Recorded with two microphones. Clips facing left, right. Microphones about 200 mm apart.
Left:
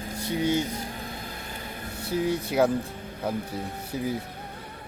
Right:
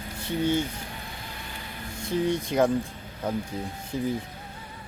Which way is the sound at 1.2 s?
40° left (ahead or behind).